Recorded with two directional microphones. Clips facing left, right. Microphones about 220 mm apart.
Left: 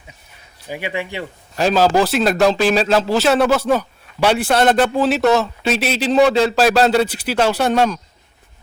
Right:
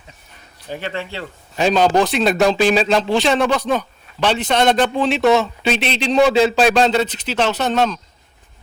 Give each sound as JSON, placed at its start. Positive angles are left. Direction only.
{"t": 0.7, "sound": "a man's voice", "side_deg": 10}